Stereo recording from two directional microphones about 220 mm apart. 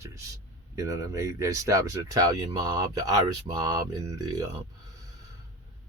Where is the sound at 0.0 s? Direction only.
15° right (ahead or behind).